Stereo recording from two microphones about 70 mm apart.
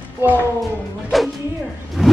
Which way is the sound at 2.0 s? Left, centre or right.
Centre.